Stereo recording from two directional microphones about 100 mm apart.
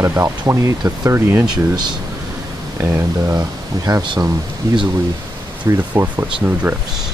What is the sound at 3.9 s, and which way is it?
Speech, 45° right (ahead or behind).